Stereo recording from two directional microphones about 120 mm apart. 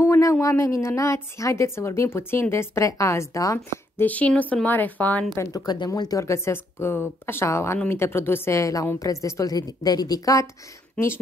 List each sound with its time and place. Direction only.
0.0 s a woman's voice: 25° left (ahead or behind)
4.0 s a woman's voice: 10° left (ahead or behind); by 10.5 s 25° left (ahead or behind)